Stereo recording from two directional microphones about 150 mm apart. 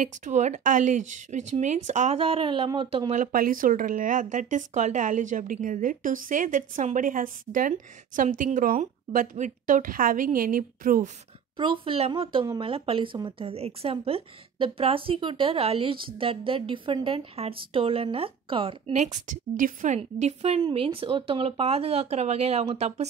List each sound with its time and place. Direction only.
0.0 s speech: 55° right (ahead or behind); by 3.1 s 30° right (ahead or behind)
3.1 s speech: 65° right (ahead or behind)
11.5 s speech: 35° right (ahead or behind)
18.9 s speech: 55° right (ahead or behind)
20.0 s speech: 45° right (ahead or behind)